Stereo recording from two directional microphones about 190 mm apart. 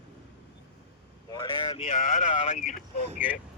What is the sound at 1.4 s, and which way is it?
Speech, 30° left (ahead or behind).